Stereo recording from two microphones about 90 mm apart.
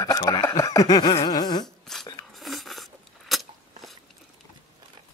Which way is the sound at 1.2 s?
50° left (ahead or behind).